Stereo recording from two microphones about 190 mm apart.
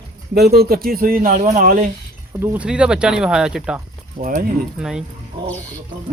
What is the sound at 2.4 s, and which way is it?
Speech, 5° right (ahead or behind).